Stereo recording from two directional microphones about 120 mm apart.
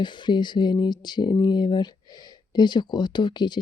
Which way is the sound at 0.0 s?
40° left (ahead or behind).